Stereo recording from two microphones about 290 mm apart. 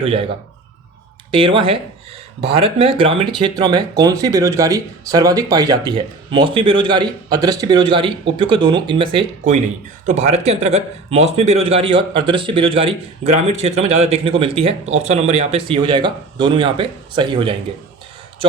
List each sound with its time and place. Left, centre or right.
0.0 s speech: centre
1.3 s speech: centre